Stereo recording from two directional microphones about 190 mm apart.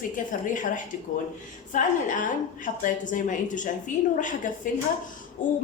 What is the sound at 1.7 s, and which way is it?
A woman's voice, 40° left (ahead or behind).